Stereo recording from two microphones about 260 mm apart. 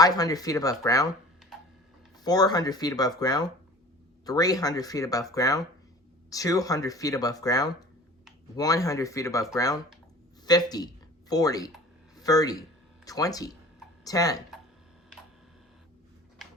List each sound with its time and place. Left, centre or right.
0.0 s speech: centre
2.2 s speech: centre